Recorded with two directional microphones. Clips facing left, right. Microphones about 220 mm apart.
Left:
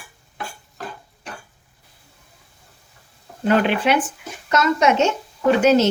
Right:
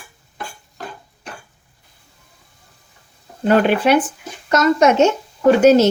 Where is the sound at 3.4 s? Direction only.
40° right (ahead or behind).